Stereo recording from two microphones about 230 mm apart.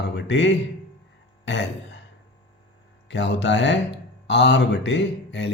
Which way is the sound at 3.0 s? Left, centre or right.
Left.